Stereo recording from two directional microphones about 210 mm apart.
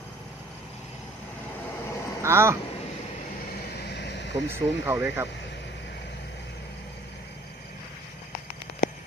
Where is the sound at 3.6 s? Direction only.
50° left (ahead or behind).